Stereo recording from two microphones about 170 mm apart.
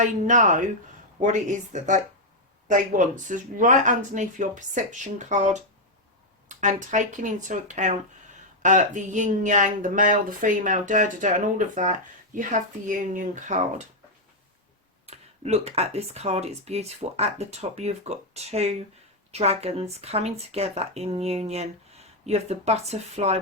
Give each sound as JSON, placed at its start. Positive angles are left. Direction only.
{"t": 0.0, "sound": "speech", "side_deg": -45}
{"t": 15.0, "sound": "speech", "side_deg": -40}